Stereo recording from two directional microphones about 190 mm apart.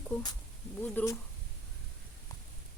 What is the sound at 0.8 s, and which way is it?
Speech, 10° left (ahead or behind).